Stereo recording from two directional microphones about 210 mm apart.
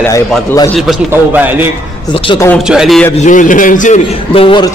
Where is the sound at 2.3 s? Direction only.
15° left (ahead or behind).